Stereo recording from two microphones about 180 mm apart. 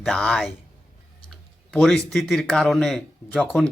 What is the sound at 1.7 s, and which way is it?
Speech, 5° left (ahead or behind).